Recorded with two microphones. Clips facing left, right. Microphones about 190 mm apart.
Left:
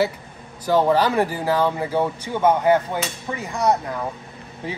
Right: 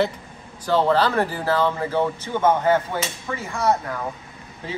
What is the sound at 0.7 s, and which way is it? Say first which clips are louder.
Speech: left 1 dB; 10° left (ahead or behind).